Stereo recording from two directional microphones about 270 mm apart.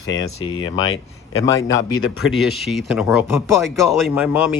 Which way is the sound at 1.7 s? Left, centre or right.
Left.